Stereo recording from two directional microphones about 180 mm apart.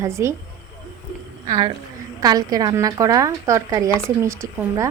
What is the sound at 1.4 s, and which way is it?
A woman's voice, 20° right (ahead or behind).